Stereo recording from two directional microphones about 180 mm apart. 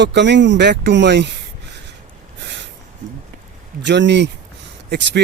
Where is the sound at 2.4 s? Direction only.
75° right (ahead or behind).